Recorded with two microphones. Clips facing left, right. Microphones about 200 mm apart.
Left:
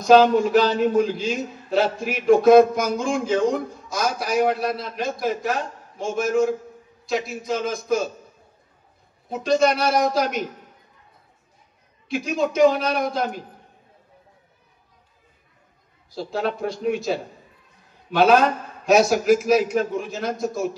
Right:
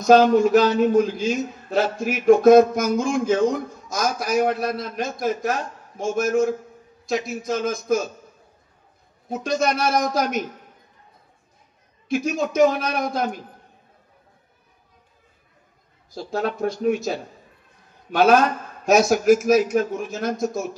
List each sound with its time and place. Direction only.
0.0 s a man's voice: 45° right (ahead or behind)
9.3 s a man's voice: 45° right (ahead or behind)
12.1 s a man's voice: 45° right (ahead or behind)
16.1 s a man's voice: 45° right (ahead or behind)